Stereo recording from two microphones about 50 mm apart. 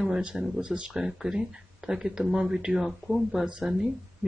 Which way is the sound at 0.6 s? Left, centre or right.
Centre.